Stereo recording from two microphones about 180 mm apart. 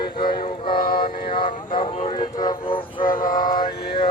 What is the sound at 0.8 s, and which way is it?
Vehicle, 55° left (ahead or behind).